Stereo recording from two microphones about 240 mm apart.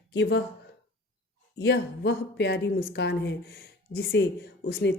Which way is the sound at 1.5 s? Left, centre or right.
Left.